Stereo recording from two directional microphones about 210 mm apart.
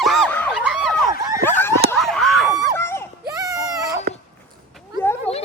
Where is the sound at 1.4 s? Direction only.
10° left (ahead or behind).